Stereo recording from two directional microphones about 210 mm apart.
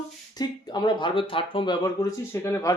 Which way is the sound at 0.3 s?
20° left (ahead or behind).